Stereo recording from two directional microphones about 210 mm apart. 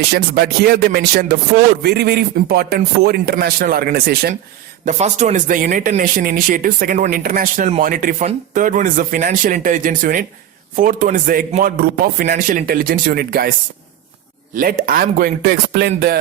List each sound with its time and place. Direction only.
0.1 s a man's voice: 50° right (ahead or behind)
4.9 s a man's voice: 35° right (ahead or behind)
14.5 s a man's voice: 40° right (ahead or behind)